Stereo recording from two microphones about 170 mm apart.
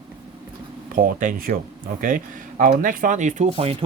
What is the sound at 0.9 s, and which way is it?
Speech, 55° right (ahead or behind).